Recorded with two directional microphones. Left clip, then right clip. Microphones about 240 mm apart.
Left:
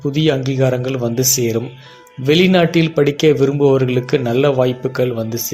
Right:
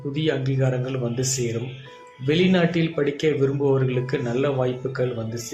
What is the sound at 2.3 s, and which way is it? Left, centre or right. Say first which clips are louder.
Speech: left 8 dB; left.